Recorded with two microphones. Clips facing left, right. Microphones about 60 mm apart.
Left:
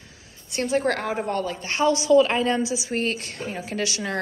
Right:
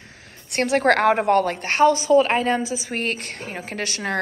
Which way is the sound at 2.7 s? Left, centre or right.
Right.